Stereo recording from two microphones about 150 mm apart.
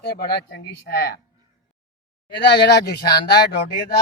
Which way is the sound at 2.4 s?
90° left.